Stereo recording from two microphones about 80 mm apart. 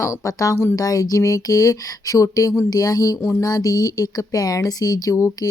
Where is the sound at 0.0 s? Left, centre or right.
Left.